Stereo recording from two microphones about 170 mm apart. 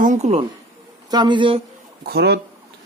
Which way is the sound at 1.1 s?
25° right (ahead or behind).